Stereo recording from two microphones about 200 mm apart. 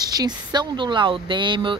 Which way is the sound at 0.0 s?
20° right (ahead or behind).